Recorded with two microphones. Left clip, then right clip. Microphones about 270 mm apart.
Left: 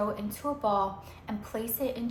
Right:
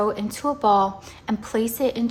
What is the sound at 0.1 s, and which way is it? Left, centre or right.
A woman's voice, right.